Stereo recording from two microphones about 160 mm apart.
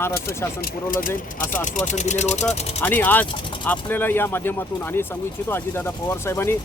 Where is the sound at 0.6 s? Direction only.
60° left (ahead or behind).